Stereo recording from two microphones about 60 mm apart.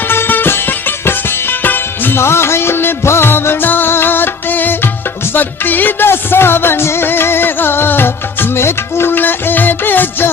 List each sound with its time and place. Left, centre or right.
0.1 s music: left